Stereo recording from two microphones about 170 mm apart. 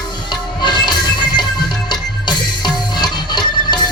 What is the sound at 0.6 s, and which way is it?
Music, 25° left (ahead or behind).